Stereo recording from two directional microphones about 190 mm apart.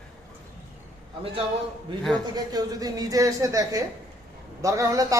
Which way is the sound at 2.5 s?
20° right (ahead or behind).